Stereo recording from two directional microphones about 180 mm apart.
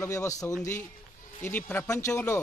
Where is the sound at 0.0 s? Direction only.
15° left (ahead or behind).